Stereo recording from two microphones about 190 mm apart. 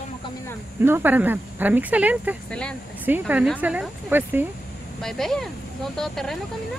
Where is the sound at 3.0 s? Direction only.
10° right (ahead or behind).